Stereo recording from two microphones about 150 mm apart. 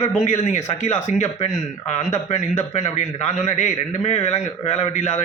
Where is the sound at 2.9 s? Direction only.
50° left (ahead or behind).